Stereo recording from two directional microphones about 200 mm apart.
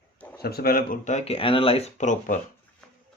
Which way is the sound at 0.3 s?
50° left (ahead or behind).